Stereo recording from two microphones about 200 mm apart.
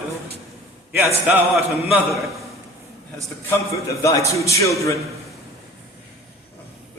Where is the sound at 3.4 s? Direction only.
15° left (ahead or behind).